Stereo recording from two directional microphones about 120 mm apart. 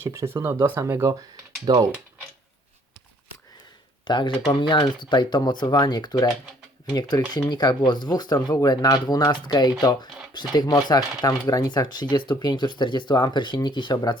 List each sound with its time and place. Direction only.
0.0 s speech: 20° right (ahead or behind)
4.0 s speech: 40° left (ahead or behind)